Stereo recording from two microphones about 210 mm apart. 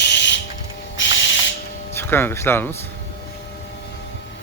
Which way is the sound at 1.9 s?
10° left (ahead or behind).